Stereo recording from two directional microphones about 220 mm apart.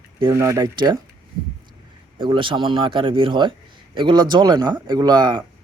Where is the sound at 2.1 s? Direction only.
25° right (ahead or behind).